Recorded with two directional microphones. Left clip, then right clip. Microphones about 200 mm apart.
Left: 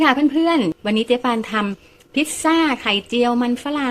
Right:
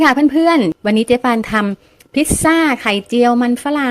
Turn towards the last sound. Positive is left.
turn(degrees=-25)  # may be behind; listen again after turning